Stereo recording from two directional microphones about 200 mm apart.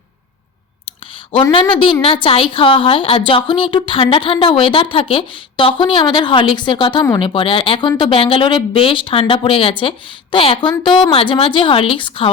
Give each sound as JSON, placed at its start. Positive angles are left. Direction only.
{"t": 1.3, "sound": "a woman's voice", "side_deg": 25}